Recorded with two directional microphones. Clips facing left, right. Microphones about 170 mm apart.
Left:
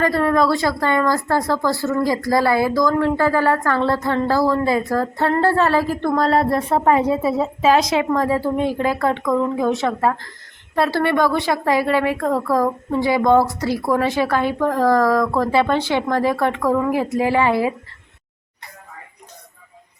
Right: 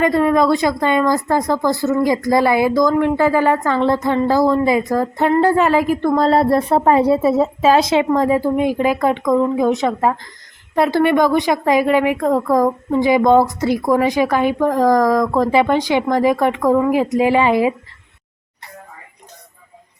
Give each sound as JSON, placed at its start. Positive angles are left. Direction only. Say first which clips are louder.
{"t": 0.0, "sound": "a woman's voice", "louder": "right 3 dB", "side_deg": -15}
{"t": 6.1, "sound": "a woman's voice", "louder": "right 3 dB", "side_deg": -30}
{"t": 7.8, "sound": "a woman's voice", "louder": "right 3 dB", "side_deg": -25}